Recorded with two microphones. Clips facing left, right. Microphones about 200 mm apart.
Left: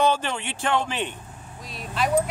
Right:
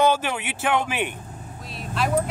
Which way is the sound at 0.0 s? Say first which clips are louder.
Right 2 dB; 10° right (ahead or behind).